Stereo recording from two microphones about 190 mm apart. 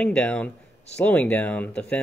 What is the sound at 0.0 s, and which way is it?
Speech, 5° left (ahead or behind).